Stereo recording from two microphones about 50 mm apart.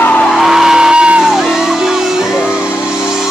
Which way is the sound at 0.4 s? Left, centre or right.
Centre.